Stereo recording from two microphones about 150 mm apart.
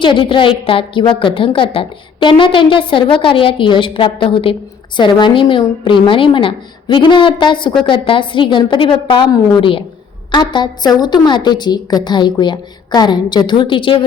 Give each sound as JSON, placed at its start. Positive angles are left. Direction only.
{"t": 0.0, "sound": "a woman's voice", "side_deg": 35}